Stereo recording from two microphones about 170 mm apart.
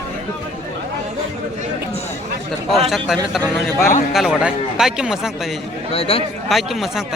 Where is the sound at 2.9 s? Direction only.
Centre (ahead or behind).